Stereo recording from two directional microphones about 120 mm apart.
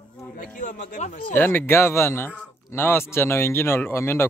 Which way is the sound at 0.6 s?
90° left.